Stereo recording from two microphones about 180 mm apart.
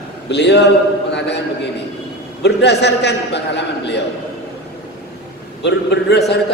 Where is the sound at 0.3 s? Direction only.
70° left (ahead or behind).